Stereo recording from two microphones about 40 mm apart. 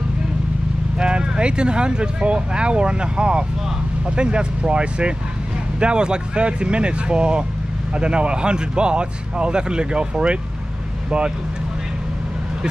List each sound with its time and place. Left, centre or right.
0.9 s speech: right